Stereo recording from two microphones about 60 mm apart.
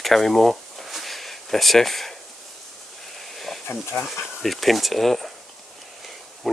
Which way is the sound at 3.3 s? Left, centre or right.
Centre.